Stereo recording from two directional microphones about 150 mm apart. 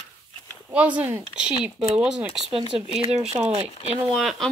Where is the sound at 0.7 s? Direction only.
10° right (ahead or behind).